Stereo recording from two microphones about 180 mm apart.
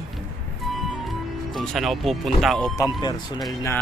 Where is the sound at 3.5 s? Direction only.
20° left (ahead or behind).